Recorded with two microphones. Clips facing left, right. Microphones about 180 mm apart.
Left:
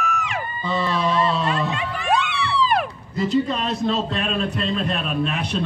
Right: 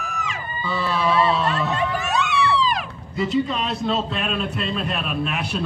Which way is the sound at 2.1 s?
55° left (ahead or behind).